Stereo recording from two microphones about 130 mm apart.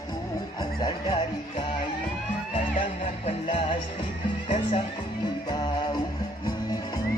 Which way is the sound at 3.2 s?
45° left (ahead or behind).